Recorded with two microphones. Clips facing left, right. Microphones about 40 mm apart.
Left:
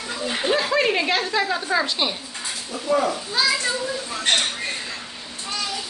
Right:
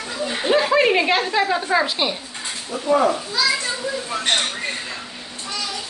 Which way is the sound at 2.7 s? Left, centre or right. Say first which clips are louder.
Right 4 dB; right.